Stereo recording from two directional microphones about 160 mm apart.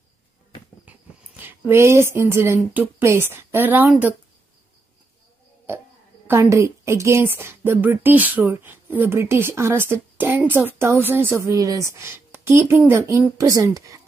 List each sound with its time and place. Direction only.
0.8 s speech: 10° right (ahead or behind)
6.2 s speech: 15° right (ahead or behind)